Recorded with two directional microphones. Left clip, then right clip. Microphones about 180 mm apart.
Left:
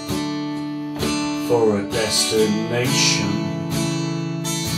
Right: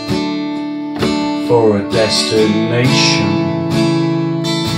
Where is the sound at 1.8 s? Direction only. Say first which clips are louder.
Right 7 dB; 40° right (ahead or behind).